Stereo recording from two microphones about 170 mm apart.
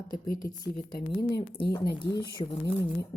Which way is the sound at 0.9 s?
60° left (ahead or behind).